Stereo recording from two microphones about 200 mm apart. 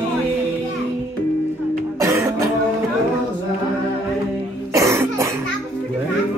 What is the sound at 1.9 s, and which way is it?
Music, 15° right (ahead or behind).